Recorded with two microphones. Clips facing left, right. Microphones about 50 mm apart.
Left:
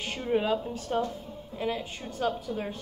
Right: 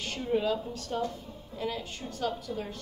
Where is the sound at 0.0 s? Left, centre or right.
Left.